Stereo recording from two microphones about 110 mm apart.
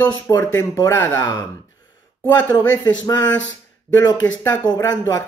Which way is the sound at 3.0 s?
35° left (ahead or behind).